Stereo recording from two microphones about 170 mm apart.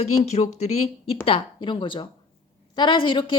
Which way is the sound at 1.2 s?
30° left (ahead or behind).